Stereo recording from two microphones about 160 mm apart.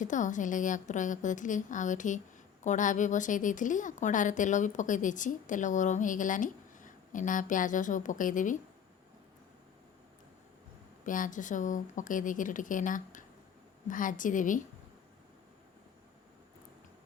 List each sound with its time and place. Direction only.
0.0 s speech: 50° left (ahead or behind)
11.0 s a woman's voice: 55° left (ahead or behind)